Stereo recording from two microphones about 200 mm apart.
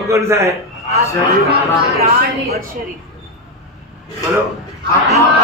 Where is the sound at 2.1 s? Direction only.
50° right (ahead or behind).